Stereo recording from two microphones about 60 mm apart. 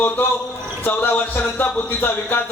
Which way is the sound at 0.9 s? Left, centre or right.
Left.